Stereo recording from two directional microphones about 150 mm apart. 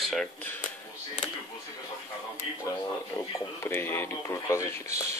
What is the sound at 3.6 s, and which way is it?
Speech, 15° left (ahead or behind).